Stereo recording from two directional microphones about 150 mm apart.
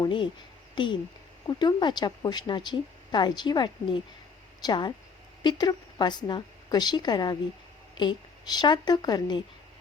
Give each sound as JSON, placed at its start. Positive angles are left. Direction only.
{"t": 0.0, "sound": "speech", "side_deg": 35}
{"t": 1.5, "sound": "a woman's voice", "side_deg": 30}